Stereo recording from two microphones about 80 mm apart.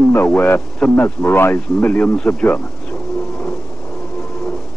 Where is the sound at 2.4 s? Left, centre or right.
Left.